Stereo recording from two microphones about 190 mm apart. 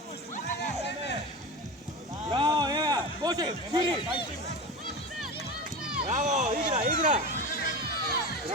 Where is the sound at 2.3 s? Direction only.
25° right (ahead or behind).